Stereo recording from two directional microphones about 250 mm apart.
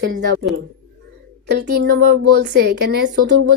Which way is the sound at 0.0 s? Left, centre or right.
Right.